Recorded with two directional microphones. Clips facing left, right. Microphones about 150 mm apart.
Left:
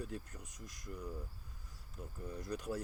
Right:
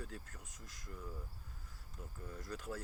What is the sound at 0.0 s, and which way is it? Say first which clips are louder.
Speech: left 5 dB; 20° left (ahead or behind).